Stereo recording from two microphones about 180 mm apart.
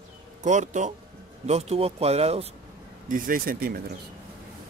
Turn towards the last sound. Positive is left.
turn(degrees=-55)  # may be behind; listen again after turning